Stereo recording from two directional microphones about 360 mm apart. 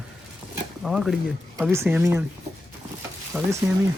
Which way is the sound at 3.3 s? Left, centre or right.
Centre.